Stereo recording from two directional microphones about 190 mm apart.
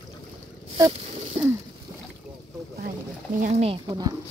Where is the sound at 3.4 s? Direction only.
35° right (ahead or behind).